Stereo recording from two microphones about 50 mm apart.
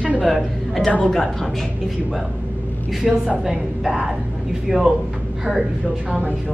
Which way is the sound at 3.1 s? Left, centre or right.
Centre.